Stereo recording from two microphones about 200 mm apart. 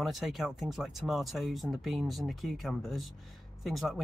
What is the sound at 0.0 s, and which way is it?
Speech, centre (ahead or behind).